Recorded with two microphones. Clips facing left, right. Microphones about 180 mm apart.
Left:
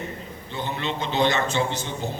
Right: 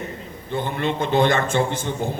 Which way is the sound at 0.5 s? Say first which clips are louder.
Right 5 dB; 50° right (ahead or behind).